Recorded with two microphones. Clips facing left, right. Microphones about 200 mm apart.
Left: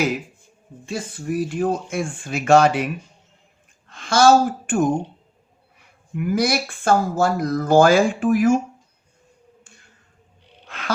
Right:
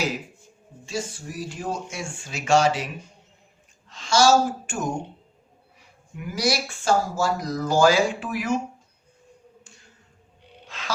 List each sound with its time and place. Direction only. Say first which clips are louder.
0.9 s speech: left 5 dB; 55° left (ahead or behind)
10.7 s music: left 5 dB; 60° left (ahead or behind)